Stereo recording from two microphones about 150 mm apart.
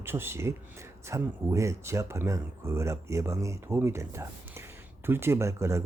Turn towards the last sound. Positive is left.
turn(degrees=-20)  # may be behind; listen again after turning